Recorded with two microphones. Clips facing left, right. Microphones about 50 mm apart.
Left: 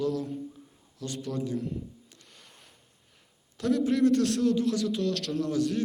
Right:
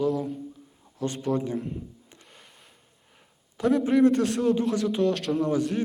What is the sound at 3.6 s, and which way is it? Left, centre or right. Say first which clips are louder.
A man's voice: right 4 dB; centre.